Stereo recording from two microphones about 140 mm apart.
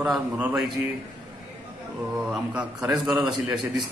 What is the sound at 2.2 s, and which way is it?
A man's voice, 5° right (ahead or behind).